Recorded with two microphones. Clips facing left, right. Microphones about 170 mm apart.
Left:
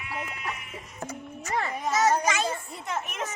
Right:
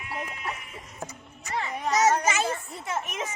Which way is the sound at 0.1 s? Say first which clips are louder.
Right 1 dB; 30° right (ahead or behind).